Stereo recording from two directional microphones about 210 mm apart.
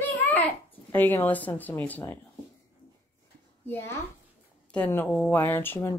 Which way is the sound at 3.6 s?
10° left (ahead or behind).